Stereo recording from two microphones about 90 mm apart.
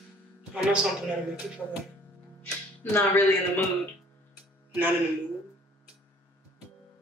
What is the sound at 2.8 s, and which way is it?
Speech, 25° left (ahead or behind).